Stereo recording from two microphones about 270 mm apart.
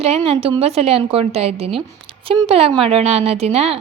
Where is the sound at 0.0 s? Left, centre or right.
Right.